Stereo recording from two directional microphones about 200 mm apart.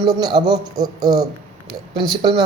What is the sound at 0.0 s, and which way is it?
Speech, 20° right (ahead or behind).